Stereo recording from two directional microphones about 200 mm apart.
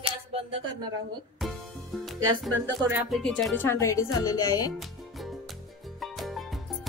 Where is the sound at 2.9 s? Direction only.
Centre (ahead or behind); by 4.7 s 20° left (ahead or behind).